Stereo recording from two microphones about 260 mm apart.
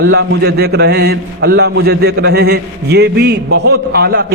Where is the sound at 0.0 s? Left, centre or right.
Right.